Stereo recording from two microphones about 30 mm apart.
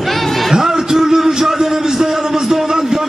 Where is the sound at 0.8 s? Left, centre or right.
Centre.